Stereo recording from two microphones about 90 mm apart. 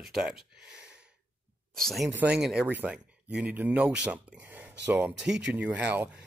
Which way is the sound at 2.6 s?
15° right (ahead or behind).